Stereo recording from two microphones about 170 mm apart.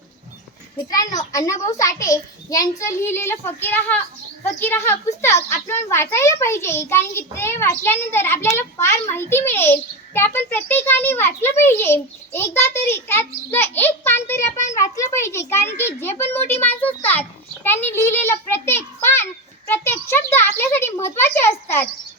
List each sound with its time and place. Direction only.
0.9 s a child's voice: 20° left (ahead or behind)